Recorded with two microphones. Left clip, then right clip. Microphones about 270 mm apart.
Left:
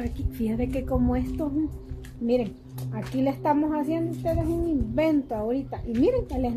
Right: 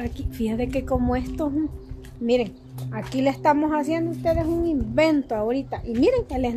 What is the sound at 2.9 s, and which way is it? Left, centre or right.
Speech, right.